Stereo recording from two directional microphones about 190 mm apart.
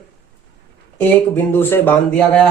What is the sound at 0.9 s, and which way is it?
Speech, 10° left (ahead or behind).